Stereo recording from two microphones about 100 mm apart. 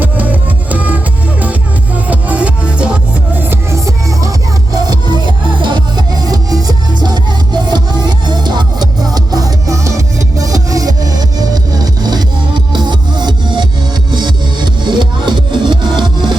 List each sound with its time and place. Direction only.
0.0 s music: 15° right (ahead or behind); by 16.3 s 50° right (ahead or behind)